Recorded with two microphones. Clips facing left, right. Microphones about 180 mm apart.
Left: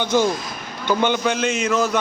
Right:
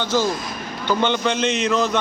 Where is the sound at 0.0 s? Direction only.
15° left (ahead or behind).